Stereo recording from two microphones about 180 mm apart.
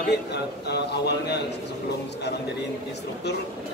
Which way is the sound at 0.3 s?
65° left (ahead or behind).